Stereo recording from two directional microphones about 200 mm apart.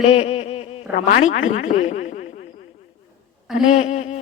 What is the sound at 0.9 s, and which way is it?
Speech, 35° left (ahead or behind).